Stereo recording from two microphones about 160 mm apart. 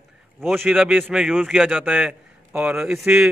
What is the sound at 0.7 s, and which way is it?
A man's voice, 10° right (ahead or behind).